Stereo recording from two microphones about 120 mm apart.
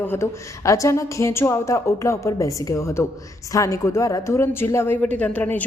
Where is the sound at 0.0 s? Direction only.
20° left (ahead or behind).